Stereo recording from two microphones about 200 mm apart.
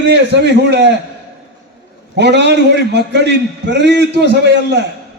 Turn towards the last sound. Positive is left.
turn(degrees=-55)  # may be behind; listen again after turning